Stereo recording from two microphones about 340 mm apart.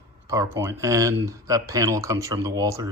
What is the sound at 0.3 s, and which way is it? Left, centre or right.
Speech, centre.